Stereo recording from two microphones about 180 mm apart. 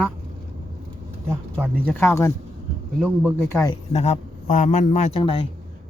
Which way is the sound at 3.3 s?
15° left (ahead or behind).